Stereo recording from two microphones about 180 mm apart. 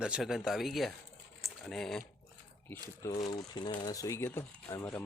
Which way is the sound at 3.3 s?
25° left (ahead or behind).